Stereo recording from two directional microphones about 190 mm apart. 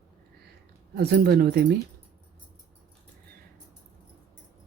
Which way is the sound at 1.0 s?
60° right (ahead or behind).